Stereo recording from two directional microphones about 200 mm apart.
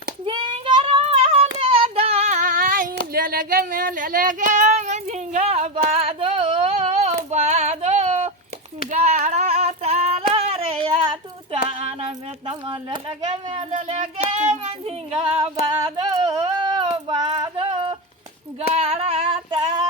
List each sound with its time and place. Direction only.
0.3 s child singing: 25° right (ahead or behind); by 2.9 s 45° right (ahead or behind)
3.1 s female singing: 45° right (ahead or behind)
7.3 s child singing: 35° right (ahead or behind)
8.9 s female singing: 35° right (ahead or behind)
10.3 s a sound: 25° right (ahead or behind)
13.1 s a child's voice: 30° right (ahead or behind)
14.6 s child singing: 30° right (ahead or behind)
15.8 s female singing: 20° right (ahead or behind)